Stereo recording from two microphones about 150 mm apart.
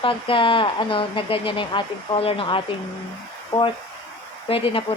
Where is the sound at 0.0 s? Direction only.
35° left (ahead or behind).